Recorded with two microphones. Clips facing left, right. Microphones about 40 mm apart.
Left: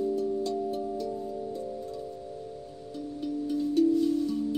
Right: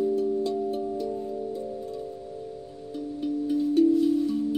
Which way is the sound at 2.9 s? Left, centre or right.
Centre.